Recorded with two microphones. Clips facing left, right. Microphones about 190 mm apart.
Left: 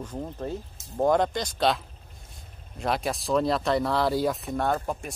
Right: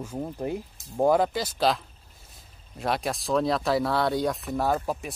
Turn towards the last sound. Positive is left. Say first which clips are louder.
# right 1 dB
turn(degrees=-5)  # may be behind; listen again after turning